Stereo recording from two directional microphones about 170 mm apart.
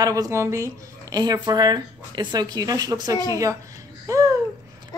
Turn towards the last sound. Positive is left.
turn(degrees=-20)  # may be behind; listen again after turning